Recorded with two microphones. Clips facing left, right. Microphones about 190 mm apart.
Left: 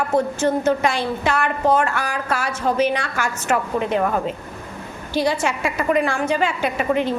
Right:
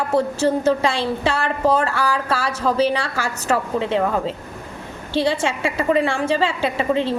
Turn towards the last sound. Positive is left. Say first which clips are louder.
# even
turn(degrees=-30)  # may be behind; listen again after turning